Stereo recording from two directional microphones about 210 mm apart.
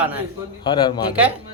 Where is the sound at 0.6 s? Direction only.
20° left (ahead or behind).